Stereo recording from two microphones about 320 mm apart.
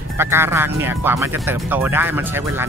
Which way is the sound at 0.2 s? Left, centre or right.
Centre.